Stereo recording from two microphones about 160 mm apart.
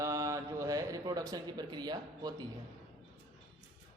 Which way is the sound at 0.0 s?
20° right (ahead or behind).